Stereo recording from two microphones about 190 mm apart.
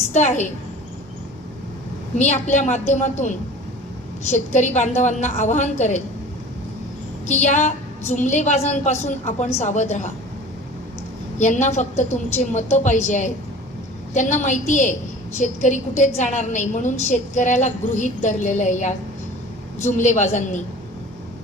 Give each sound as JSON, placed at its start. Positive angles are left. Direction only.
{"t": 0.1, "sound": "a woman's voice", "side_deg": 40}
{"t": 2.1, "sound": "a woman's voice", "side_deg": 40}
{"t": 7.3, "sound": "a woman's voice", "side_deg": 40}
{"t": 11.3, "sound": "a woman's voice", "side_deg": 40}